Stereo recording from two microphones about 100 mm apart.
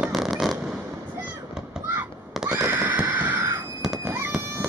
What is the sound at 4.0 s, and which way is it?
Fireworks, 25° right (ahead or behind).